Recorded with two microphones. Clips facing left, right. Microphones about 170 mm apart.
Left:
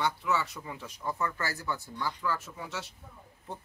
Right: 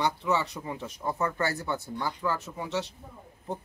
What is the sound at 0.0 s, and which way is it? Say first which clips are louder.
Speech: right 3 dB; 20° right (ahead or behind).